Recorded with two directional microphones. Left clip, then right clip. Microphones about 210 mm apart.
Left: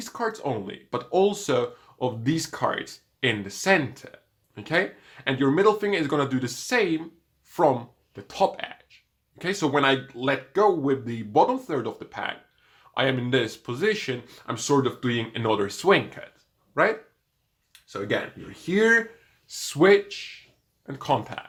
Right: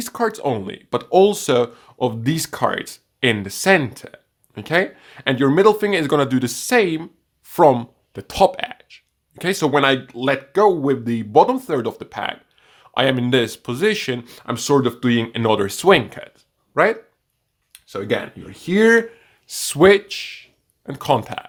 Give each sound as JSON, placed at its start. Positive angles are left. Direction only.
{"t": 0.0, "sound": "speech", "side_deg": -50}